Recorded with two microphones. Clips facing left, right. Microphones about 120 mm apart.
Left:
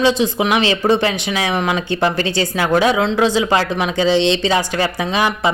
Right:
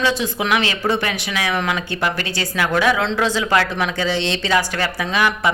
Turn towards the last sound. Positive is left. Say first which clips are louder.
# left 2 dB
turn(degrees=20)  # may be behind; listen again after turning